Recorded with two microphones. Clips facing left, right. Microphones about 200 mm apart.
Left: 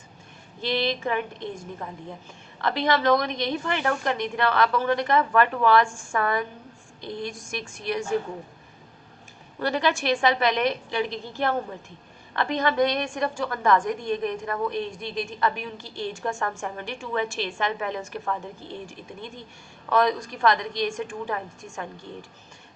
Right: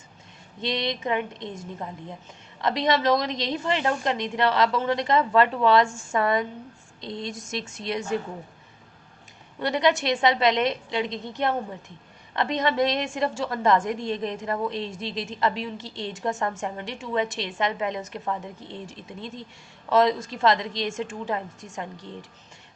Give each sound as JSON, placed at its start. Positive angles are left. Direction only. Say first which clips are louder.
{"t": 0.6, "sound": "a woman's voice", "louder": "left 2 dB", "side_deg": -20}
{"t": 9.6, "sound": "a woman's voice", "louder": "right 2 dB", "side_deg": -20}